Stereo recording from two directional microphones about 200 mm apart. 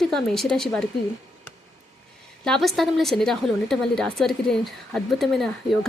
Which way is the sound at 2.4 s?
Centre (ahead or behind).